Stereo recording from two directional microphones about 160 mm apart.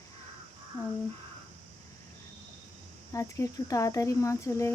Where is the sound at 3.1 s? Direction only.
20° left (ahead or behind).